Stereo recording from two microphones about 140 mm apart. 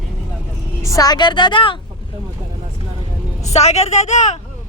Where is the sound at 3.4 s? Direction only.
50° left (ahead or behind).